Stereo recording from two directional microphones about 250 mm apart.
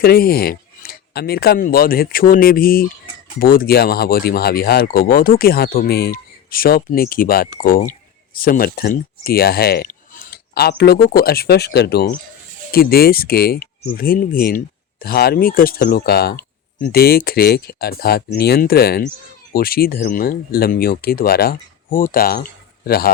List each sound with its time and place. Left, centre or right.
0.0 s speech: left